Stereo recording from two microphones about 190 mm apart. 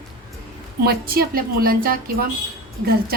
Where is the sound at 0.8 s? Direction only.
50° right (ahead or behind).